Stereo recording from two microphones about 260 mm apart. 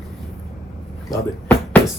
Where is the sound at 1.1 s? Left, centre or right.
Centre.